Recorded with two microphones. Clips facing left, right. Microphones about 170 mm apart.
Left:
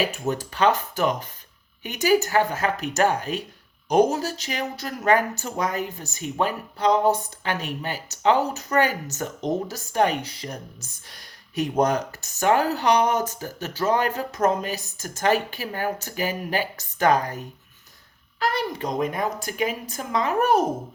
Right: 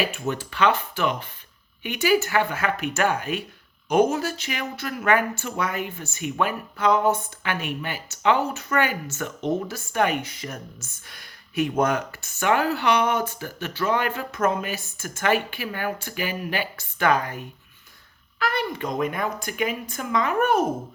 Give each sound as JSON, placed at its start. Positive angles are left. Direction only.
{"t": 0.0, "sound": "speech", "side_deg": 40}